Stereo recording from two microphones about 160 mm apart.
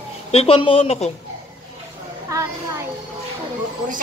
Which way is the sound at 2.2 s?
20° right (ahead or behind).